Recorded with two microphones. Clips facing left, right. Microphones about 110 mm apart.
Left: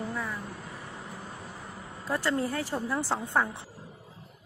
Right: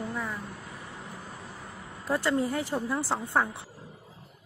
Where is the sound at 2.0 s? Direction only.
15° right (ahead or behind).